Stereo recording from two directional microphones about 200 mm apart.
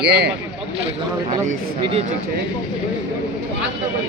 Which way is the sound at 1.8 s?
30° right (ahead or behind).